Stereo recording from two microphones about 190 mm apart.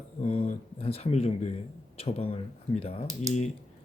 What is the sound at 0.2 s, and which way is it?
Speech, 30° left (ahead or behind).